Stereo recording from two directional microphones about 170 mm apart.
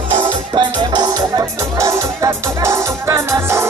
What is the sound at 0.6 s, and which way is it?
Music, 25° right (ahead or behind).